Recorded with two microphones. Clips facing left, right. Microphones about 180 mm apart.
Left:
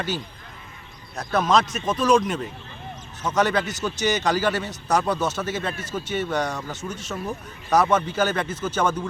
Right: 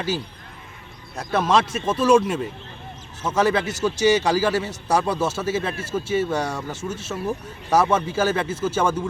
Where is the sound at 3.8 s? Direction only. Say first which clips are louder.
Right 7 dB; centre (ahead or behind).